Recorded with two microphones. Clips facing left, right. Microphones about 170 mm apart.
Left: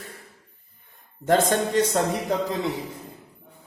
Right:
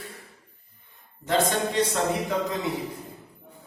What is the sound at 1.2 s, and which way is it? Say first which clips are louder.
Speech: left 3 dB; 45° left (ahead or behind).